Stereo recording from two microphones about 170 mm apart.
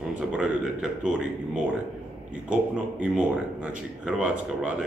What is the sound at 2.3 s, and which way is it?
A man's voice, 5° right (ahead or behind).